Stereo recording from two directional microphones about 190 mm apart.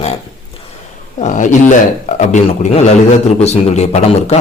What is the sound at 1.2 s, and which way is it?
Speech, 40° left (ahead or behind).